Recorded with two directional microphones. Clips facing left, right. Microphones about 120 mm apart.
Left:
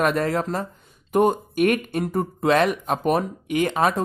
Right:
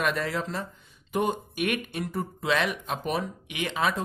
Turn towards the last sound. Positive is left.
turn(degrees=45)  # may be behind; listen again after turning